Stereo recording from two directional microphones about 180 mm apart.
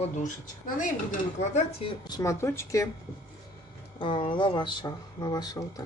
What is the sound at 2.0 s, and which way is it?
Speech, 20° left (ahead or behind).